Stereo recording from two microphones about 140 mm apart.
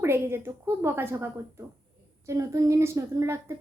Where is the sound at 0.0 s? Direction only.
20° right (ahead or behind).